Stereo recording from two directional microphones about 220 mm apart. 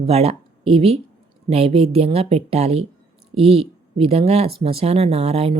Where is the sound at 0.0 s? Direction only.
30° right (ahead or behind).